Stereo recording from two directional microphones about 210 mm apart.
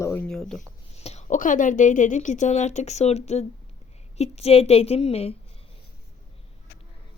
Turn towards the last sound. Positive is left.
turn(degrees=30)  # may be behind; listen again after turning